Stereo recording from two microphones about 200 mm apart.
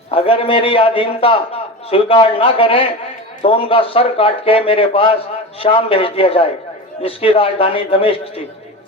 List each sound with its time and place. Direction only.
0.1 s a man's voice: 30° left (ahead or behind)